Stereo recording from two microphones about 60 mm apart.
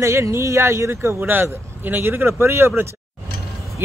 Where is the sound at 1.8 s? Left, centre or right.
Right.